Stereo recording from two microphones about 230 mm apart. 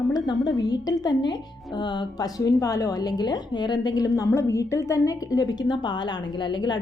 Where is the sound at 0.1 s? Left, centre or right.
Centre.